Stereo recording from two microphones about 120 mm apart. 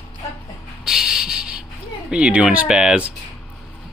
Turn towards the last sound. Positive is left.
turn(degrees=-10)  # may be behind; listen again after turning